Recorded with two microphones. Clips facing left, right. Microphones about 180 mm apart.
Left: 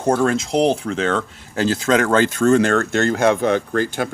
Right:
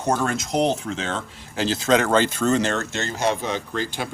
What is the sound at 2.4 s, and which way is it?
Speech, 50° left (ahead or behind).